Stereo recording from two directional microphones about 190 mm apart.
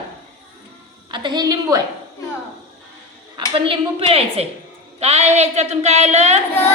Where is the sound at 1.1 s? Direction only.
25° right (ahead or behind).